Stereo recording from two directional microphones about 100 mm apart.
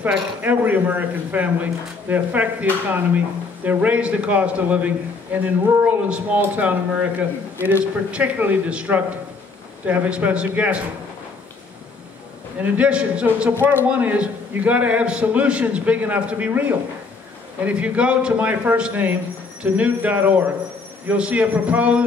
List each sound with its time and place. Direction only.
0.4 s a man's voice: 15° right (ahead or behind)
12.5 s a man's voice: 15° right (ahead or behind)